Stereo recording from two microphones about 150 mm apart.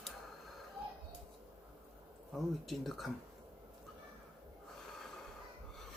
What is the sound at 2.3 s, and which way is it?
Speech, centre (ahead or behind).